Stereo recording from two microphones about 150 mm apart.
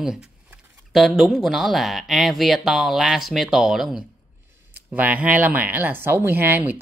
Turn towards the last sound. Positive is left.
turn(degrees=-10)  # may be behind; listen again after turning